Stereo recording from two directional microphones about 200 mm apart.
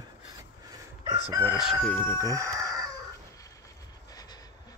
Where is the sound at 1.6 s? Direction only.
5° right (ahead or behind).